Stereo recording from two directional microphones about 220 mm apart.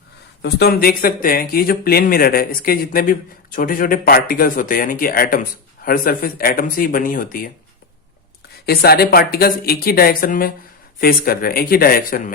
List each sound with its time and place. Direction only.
0.4 s speech: 45° left (ahead or behind)
8.6 s speech: 45° left (ahead or behind)